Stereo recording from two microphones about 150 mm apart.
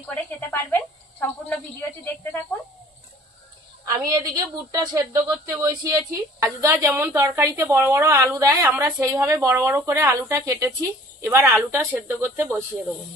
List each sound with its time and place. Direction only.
0.0 s speech: 10° left (ahead or behind)
3.8 s a woman's voice: 25° right (ahead or behind)